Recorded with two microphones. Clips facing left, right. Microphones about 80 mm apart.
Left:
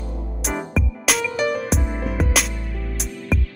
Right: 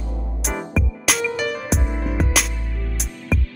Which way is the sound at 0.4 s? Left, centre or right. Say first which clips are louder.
Even; centre.